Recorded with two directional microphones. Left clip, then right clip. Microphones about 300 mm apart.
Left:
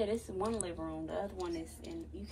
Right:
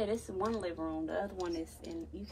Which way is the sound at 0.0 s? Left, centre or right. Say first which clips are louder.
Right 1 dB; right.